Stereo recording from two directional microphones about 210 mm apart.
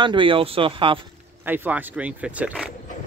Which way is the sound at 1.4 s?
10° right (ahead or behind).